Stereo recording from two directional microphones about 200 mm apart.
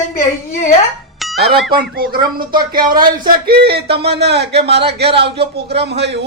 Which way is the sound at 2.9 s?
20° right (ahead or behind).